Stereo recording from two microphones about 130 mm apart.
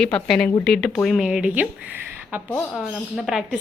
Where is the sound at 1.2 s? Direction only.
5° right (ahead or behind).